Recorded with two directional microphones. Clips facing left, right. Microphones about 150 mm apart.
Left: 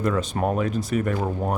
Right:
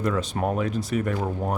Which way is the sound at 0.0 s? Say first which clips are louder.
Left 2 dB; 50° left (ahead or behind).